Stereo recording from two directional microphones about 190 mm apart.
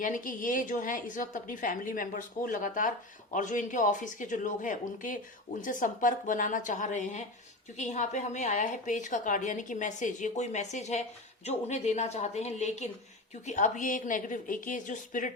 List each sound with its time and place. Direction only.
0.0 s a woman's voice: 45° left (ahead or behind)